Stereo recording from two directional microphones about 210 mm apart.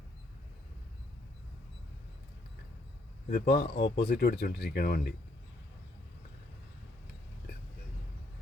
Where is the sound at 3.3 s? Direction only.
50° left (ahead or behind).